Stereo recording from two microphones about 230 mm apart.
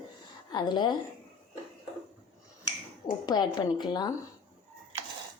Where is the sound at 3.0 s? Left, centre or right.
Centre.